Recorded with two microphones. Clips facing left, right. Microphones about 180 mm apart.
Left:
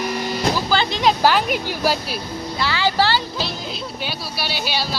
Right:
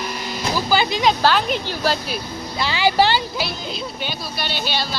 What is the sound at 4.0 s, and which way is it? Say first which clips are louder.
Speech: even; 5° left (ahead or behind).